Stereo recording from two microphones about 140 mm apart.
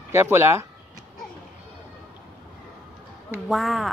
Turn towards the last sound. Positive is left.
turn(degrees=0)  # may be behind; listen again after turning